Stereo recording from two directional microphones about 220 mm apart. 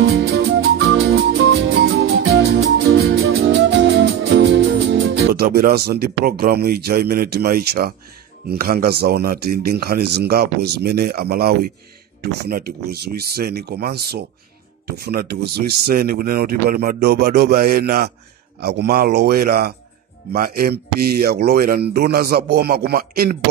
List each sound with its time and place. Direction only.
0.0 s music: 45° right (ahead or behind)
4.8 s speech: 45° right (ahead or behind)